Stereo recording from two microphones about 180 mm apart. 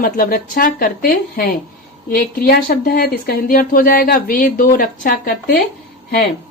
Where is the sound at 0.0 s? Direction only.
50° left (ahead or behind).